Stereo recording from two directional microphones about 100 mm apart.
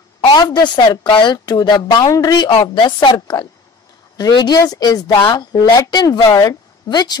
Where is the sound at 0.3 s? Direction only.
50° left (ahead or behind).